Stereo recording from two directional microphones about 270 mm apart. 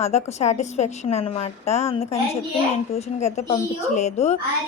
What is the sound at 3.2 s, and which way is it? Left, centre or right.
A woman's voice, left.